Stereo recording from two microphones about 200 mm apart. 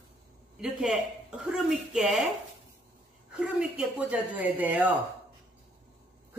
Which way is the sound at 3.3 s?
5° right (ahead or behind).